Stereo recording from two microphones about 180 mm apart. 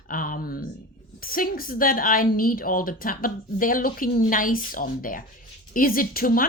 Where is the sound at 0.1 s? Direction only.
50° left (ahead or behind).